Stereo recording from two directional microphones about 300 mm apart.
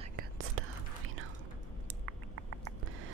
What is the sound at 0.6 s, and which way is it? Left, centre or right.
Whispering, right.